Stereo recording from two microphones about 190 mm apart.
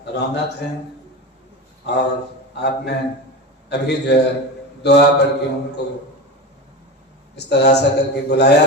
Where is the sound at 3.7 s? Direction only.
60° left (ahead or behind).